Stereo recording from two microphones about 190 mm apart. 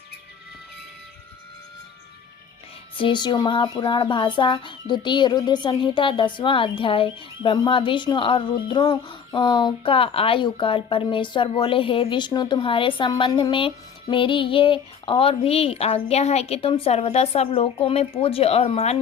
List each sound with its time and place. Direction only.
3.0 s speech: 25° left (ahead or behind)